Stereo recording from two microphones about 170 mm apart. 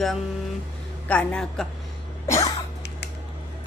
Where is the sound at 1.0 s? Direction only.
5° left (ahead or behind).